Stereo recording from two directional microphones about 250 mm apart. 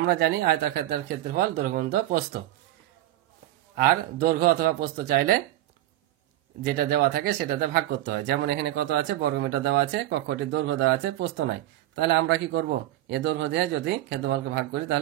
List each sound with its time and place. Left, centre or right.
0.0 s speech: right
3.7 s speech: right
6.6 s speech: right